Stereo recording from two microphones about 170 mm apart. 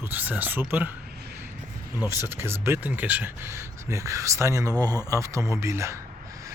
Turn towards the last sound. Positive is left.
turn(degrees=-15)  # may be behind; listen again after turning